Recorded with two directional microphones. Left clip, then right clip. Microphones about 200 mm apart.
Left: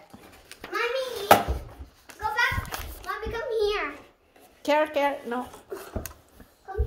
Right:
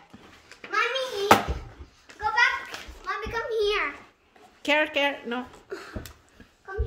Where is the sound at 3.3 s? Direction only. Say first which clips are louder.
Even; 5° right (ahead or behind).